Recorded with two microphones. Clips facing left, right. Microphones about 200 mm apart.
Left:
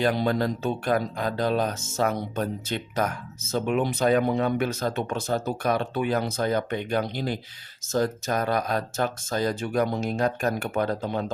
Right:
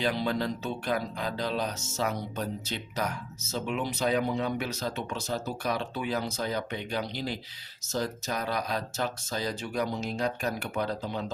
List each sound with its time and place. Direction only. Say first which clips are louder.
0.0 s speech: left 5 dB; 50° left (ahead or behind)